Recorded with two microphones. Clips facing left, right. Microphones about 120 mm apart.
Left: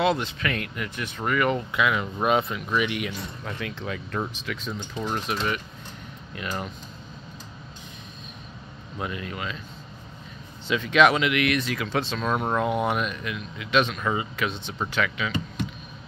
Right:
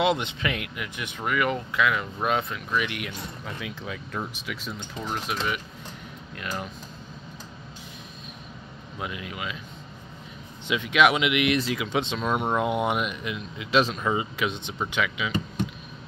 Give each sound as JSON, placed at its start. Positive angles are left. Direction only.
{"t": 0.0, "sound": "speech", "side_deg": -20}
{"t": 0.6, "sound": "speech", "side_deg": -10}
{"t": 1.3, "sound": "speech", "side_deg": 0}
{"t": 8.9, "sound": "speech", "side_deg": -5}
{"t": 10.7, "sound": "speech", "side_deg": -10}
{"t": 11.5, "sound": "speech", "side_deg": -25}